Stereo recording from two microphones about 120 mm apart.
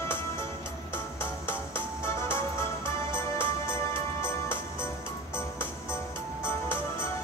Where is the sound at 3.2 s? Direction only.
20° left (ahead or behind).